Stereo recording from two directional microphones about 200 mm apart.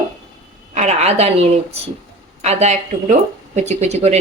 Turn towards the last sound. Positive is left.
turn(degrees=-35)  # may be behind; listen again after turning